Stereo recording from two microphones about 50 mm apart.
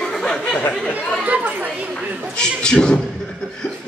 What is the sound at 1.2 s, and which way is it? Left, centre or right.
Speech, right.